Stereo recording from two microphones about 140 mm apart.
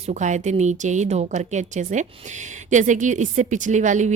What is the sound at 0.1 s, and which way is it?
A woman's voice, 60° right (ahead or behind).